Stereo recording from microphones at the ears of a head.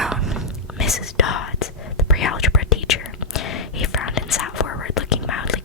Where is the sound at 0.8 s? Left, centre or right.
Left.